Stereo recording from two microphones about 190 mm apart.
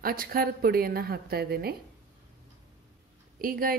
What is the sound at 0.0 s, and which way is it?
A woman's voice, 50° right (ahead or behind).